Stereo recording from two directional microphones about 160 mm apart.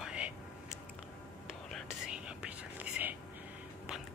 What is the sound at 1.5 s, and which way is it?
Whispering, centre (ahead or behind).